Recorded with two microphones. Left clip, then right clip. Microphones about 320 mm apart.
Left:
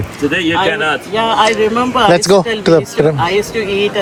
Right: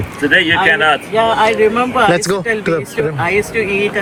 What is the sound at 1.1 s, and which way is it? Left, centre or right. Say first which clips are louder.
Speech: left 3 dB; left.